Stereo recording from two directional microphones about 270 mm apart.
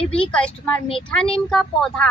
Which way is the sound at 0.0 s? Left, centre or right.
Left.